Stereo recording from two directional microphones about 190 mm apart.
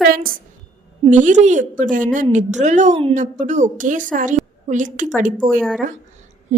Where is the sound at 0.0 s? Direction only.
50° right (ahead or behind).